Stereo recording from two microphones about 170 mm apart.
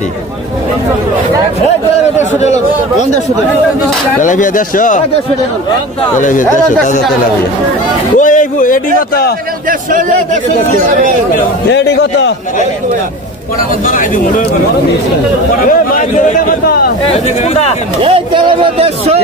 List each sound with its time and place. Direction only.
2.4 s a sound: 40° left (ahead or behind)
4.2 s a man's voice: 50° left (ahead or behind)
6.1 s a man's voice: 50° left (ahead or behind)
8.2 s a sound: 50° left (ahead or behind)
9.7 s speech: 50° right (ahead or behind)
11.7 s a man's voice: 85° left
13.8 s a man's voice: 50° left (ahead or behind)
15.6 s a man's voice: 50° left (ahead or behind)
17.1 s speech: 40° left (ahead or behind)
18.0 s speech: 30° right (ahead or behind)